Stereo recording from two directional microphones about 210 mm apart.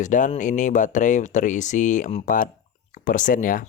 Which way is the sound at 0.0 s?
35° left (ahead or behind).